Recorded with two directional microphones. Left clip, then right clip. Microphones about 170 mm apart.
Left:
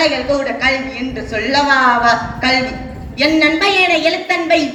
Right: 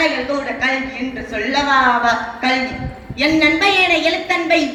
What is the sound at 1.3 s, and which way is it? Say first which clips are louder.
A woman's voice: left 2 dB; 25° left (ahead or behind).